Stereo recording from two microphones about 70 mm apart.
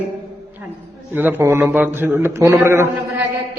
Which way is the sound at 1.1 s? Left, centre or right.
Right.